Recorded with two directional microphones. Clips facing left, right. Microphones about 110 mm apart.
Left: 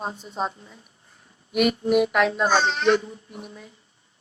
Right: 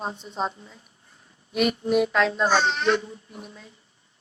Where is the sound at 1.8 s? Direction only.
20° left (ahead or behind).